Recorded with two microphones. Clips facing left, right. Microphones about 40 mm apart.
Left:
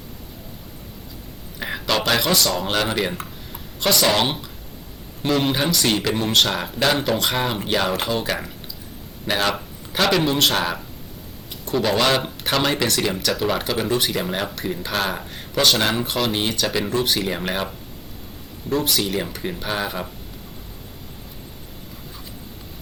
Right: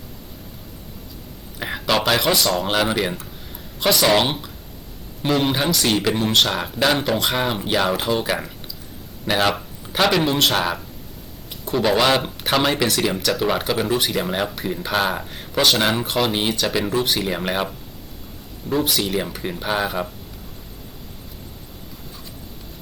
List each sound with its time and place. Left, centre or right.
1.5 s speech: centre